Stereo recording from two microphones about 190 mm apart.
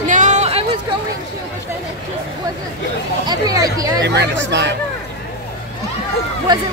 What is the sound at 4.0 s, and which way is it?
Speech, 65° right (ahead or behind).